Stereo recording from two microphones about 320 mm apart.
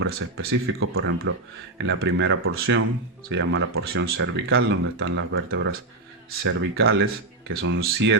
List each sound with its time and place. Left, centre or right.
0.0 s speech: right